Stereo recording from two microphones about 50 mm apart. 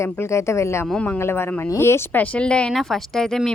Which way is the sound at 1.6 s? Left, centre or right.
Left.